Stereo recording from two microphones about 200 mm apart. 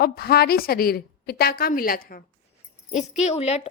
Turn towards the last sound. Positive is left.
turn(degrees=35)  # may be behind; listen again after turning